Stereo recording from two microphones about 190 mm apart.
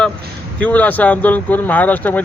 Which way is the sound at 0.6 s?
10° left (ahead or behind).